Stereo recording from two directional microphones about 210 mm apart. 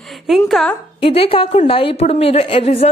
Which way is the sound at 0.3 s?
Centre (ahead or behind).